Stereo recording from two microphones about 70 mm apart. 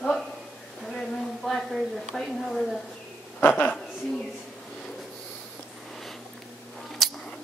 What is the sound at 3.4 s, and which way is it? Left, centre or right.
Speech, left.